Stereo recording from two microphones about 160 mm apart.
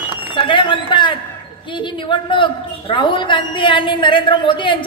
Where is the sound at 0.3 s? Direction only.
30° left (ahead or behind).